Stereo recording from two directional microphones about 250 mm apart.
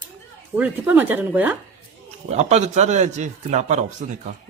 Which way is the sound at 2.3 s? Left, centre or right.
Right.